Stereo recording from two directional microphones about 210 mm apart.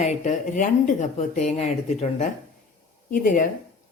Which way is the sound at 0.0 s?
40° left (ahead or behind).